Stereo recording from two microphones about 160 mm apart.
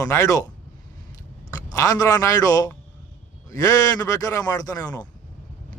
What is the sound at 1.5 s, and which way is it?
A man's voice, 20° left (ahead or behind).